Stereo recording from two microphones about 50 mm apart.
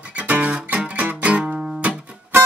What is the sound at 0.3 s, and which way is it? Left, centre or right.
Music, right.